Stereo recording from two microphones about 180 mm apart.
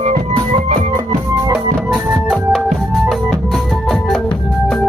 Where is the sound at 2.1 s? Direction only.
Centre (ahead or behind).